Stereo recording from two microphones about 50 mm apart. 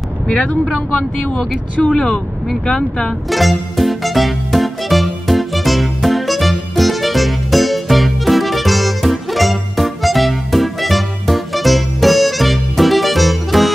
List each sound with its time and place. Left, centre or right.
0.3 s speech: left
2.0 s speech: centre
3.3 s music: centre